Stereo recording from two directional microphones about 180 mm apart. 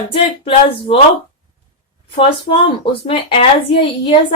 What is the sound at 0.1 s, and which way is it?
Speech, 30° left (ahead or behind).